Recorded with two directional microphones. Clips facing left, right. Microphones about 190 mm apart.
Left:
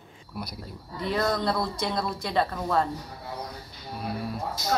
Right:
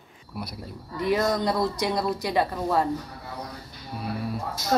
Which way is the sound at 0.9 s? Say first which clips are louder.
Right 3 dB; 15° right (ahead or behind).